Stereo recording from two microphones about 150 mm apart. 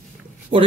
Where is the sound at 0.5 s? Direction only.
60° right (ahead or behind).